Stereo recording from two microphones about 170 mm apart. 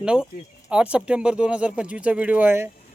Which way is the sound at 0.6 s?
5° right (ahead or behind).